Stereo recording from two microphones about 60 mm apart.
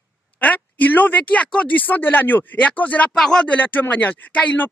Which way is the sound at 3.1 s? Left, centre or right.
Centre.